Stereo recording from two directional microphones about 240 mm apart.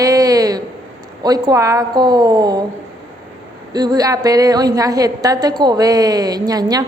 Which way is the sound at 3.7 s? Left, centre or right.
Centre.